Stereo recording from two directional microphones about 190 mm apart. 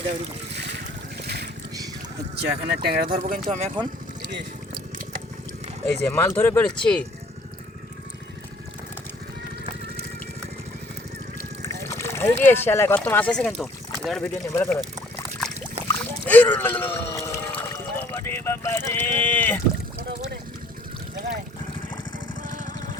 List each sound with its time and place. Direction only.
0.5 s boat: 65° right (ahead or behind)
1.2 s vehicle: 60° right (ahead or behind)
2.4 s speech: 55° right (ahead or behind); by 3.7 s 40° right (ahead or behind)
5.8 s speech: 10° left (ahead or behind)
11.6 s speech: 15° left (ahead or behind)
14.4 s speech: 15° left (ahead or behind)
15.9 s a sound: 10° left (ahead or behind)